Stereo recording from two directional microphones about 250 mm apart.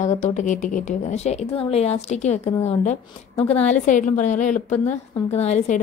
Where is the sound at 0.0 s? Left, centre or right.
Left.